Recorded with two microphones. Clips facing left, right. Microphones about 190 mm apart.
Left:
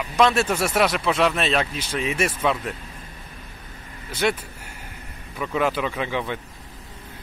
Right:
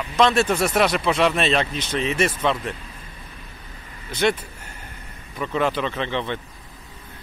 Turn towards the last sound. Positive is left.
turn(degrees=10)  # may be behind; listen again after turning